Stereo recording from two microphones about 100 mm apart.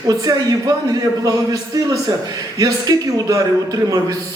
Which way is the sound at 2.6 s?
35° right (ahead or behind).